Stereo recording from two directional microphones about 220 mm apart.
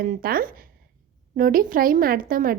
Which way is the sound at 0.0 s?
40° right (ahead or behind).